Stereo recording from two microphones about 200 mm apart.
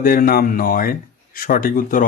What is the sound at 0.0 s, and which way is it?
Speech, 45° left (ahead or behind).